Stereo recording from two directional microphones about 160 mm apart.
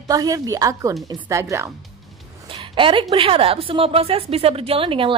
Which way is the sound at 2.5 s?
30° right (ahead or behind).